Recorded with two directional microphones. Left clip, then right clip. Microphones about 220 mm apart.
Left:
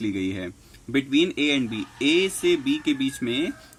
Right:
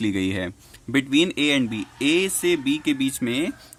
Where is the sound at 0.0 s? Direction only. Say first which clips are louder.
Right 3 dB; 30° right (ahead or behind).